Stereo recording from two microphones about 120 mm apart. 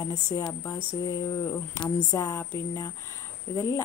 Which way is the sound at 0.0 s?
30° left (ahead or behind).